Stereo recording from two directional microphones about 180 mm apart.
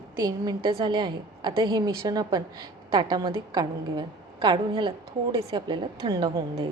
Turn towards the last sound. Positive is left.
turn(degrees=-20)  # may be behind; listen again after turning